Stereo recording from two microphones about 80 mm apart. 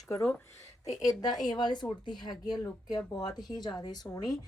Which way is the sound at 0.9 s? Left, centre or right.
Left.